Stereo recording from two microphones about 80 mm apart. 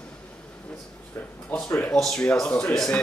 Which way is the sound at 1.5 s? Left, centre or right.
Centre.